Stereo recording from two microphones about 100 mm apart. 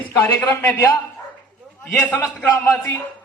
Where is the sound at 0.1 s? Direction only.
25° left (ahead or behind).